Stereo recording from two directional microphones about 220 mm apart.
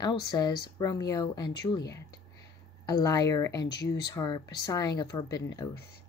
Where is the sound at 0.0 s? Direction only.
20° left (ahead or behind).